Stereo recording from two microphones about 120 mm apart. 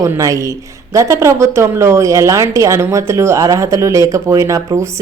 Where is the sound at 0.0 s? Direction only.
25° right (ahead or behind).